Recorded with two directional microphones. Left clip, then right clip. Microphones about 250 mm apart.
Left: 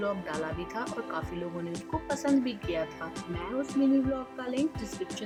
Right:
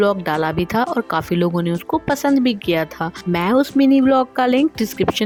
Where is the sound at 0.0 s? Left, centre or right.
Right.